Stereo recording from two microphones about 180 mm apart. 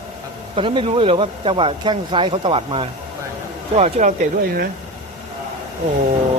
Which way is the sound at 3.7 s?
40° right (ahead or behind).